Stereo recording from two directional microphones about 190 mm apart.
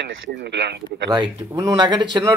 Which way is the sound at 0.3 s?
60° right (ahead or behind).